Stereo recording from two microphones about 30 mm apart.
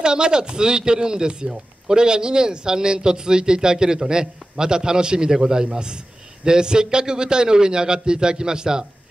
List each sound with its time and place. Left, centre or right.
0.0 s speech: right